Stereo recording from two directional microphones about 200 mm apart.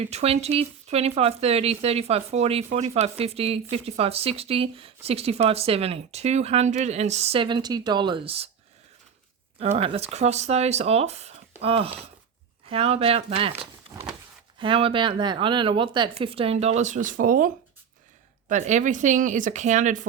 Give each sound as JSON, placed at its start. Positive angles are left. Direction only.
{"t": 0.0, "sound": "speech", "side_deg": -30}
{"t": 9.6, "sound": "speech", "side_deg": -30}
{"t": 14.6, "sound": "speech", "side_deg": -25}